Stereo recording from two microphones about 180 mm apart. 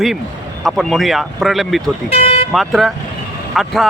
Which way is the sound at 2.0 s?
35° left (ahead or behind).